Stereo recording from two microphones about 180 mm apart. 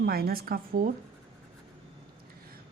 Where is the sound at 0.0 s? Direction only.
60° right (ahead or behind).